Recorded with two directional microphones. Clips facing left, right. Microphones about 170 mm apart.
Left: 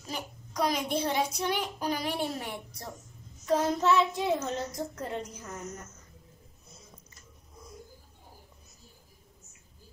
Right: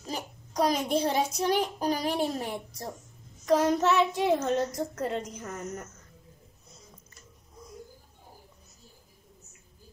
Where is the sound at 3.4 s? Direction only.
70° right (ahead or behind).